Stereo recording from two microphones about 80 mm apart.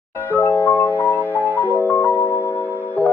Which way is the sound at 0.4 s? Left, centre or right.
Left.